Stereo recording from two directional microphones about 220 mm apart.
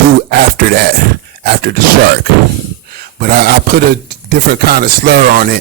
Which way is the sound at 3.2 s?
45° right (ahead or behind).